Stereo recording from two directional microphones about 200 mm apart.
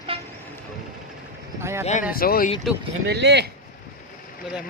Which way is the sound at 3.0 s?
55° right (ahead or behind).